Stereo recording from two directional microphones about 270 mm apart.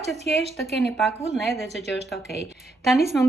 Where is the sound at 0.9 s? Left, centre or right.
Centre.